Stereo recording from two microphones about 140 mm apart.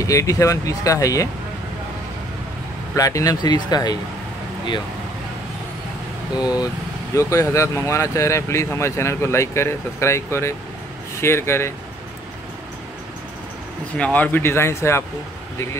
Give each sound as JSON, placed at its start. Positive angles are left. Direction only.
{"t": 0.0, "sound": "speech", "side_deg": 25}
{"t": 2.9, "sound": "speech", "side_deg": 20}
{"t": 6.3, "sound": "speech", "side_deg": 30}
{"t": 13.9, "sound": "speech", "side_deg": 10}